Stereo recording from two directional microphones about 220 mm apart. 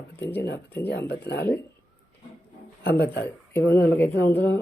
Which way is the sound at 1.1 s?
50° left (ahead or behind).